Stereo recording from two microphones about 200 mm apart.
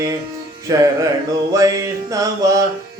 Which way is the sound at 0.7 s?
20° right (ahead or behind).